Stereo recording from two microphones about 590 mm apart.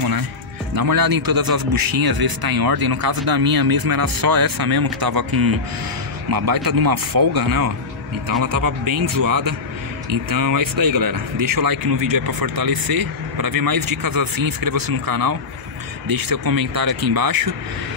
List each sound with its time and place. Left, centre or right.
0.7 s speech: right
6.3 s speech: right